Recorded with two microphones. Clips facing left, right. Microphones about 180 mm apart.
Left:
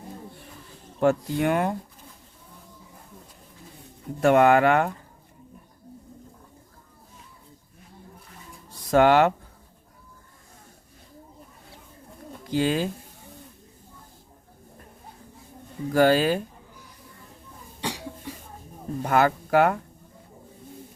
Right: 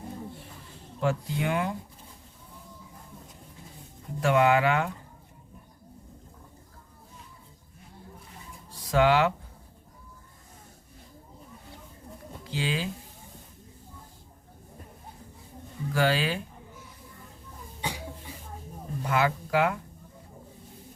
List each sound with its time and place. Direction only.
0.9 s speech: 50° left (ahead or behind)
4.2 s speech: 50° left (ahead or behind)
8.9 s speech: 50° left (ahead or behind)
12.5 s speech: 45° left (ahead or behind)
15.9 s speech: 45° left (ahead or behind)
17.7 s cough: 85° left
19.0 s speech: 45° left (ahead or behind)